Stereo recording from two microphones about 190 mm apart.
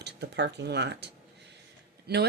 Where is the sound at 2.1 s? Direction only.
60° right (ahead or behind).